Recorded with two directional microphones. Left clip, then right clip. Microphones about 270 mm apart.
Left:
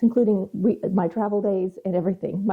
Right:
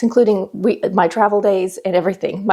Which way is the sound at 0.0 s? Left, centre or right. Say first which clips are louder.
Right 7 dB; centre.